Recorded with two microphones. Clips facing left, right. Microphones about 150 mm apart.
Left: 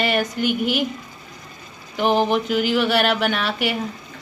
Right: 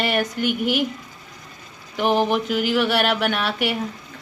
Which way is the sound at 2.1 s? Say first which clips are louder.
Left 1 dB; 25° left (ahead or behind).